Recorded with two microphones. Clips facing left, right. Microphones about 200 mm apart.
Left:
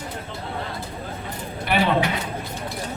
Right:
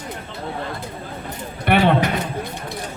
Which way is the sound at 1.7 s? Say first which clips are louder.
Right 4 dB; 60° right (ahead or behind).